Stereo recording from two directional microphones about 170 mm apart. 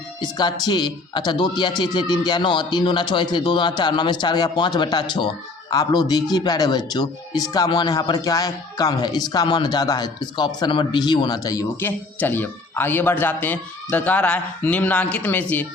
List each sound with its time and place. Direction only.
0.2 s speech: 25° left (ahead or behind)